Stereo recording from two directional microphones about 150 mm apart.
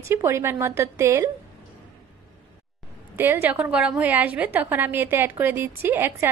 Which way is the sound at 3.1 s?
15° right (ahead or behind).